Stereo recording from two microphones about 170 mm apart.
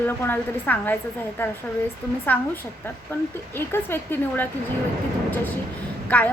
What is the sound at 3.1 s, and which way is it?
A woman's voice, 10° left (ahead or behind).